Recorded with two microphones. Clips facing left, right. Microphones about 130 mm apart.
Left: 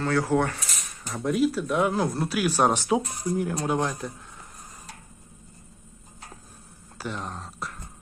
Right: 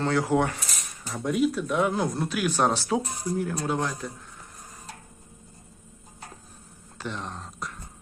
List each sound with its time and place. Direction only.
0.0 s speech: 15° right (ahead or behind)
1.0 s speech: centre (ahead or behind); by 4.1 s 15° left (ahead or behind)
7.0 s speech: 10° left (ahead or behind)